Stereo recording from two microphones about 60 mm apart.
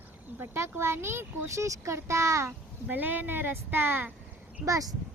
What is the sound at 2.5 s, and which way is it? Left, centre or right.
Speech, right.